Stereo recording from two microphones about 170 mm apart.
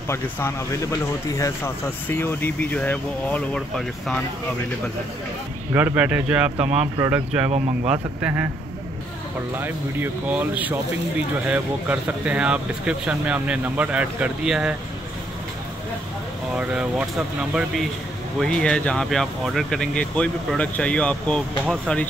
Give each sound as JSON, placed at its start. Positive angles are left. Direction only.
{"t": 0.1, "sound": "speech", "side_deg": 15}
{"t": 5.7, "sound": "speech", "side_deg": -10}
{"t": 9.6, "sound": "speech", "side_deg": -10}
{"t": 16.5, "sound": "speech", "side_deg": -5}